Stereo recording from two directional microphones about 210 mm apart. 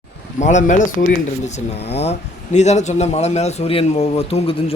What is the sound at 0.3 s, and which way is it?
Speech, 35° left (ahead or behind).